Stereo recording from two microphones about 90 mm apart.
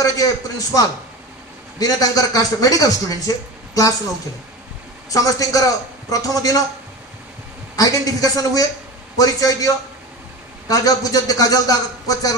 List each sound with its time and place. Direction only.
0.0 s a man's voice: 40° left (ahead or behind)
5.1 s a man's voice: 40° left (ahead or behind)
7.7 s speech: 45° left (ahead or behind)
10.7 s speech: 45° left (ahead or behind)